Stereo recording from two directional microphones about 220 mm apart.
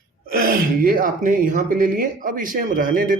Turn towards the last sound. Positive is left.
turn(degrees=-40)  # may be behind; listen again after turning